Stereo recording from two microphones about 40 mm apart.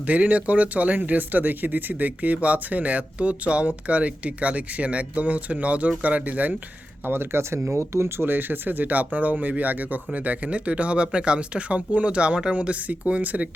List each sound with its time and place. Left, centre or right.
0.0 s speech: right
7.0 s speech: right
7.9 s speech: right